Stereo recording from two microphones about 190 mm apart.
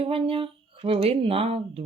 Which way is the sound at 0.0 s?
30° right (ahead or behind).